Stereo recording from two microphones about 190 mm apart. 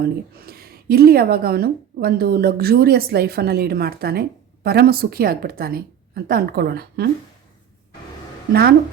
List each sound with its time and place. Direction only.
0.0 s speech: 55° right (ahead or behind)